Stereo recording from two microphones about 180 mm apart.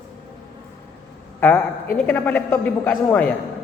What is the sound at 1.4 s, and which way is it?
A man's voice, 10° left (ahead or behind).